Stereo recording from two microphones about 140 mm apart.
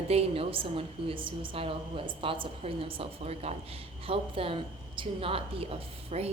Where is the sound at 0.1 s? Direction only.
45° right (ahead or behind).